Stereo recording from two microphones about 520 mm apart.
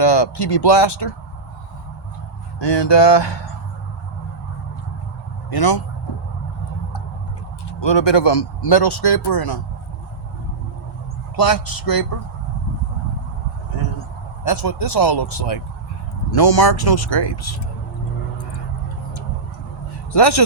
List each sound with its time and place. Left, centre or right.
0.0 s speech: left
2.6 s speech: left
5.5 s speech: left
7.8 s speech: left
11.3 s speech: left
14.4 s speech: left